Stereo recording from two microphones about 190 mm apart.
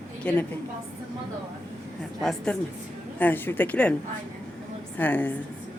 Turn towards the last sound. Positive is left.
turn(degrees=10)  # may be behind; listen again after turning